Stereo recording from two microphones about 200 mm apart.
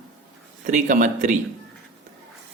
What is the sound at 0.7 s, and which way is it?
Speech, 40° right (ahead or behind).